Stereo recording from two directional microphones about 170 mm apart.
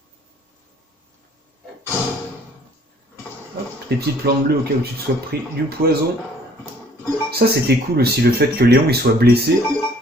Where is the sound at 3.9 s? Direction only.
70° right (ahead or behind).